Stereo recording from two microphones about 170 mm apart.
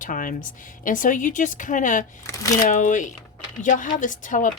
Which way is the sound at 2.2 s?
20° left (ahead or behind).